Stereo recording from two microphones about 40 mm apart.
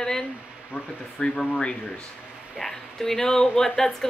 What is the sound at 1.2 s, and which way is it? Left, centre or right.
Speech, left.